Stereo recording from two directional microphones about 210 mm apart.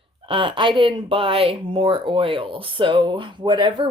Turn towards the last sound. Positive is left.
turn(degrees=-20)  # may be behind; listen again after turning